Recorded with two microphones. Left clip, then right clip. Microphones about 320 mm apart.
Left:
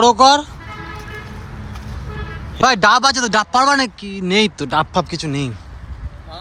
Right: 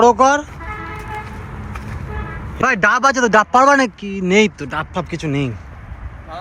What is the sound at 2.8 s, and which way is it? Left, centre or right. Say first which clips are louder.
Speech: right 2 dB; centre.